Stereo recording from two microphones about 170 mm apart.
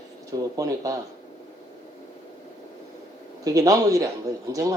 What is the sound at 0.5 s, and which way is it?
Speech, 20° right (ahead or behind).